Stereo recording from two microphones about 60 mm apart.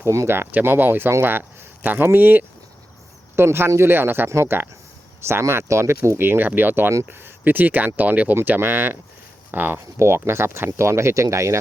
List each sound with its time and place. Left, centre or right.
0.0 s speech: right
0.5 s speech: right
3.3 s speech: right
4.3 s speech: right
6.1 s speech: right
10.0 s speech: right